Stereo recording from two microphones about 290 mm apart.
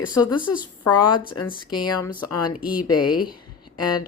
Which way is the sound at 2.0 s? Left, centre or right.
Left.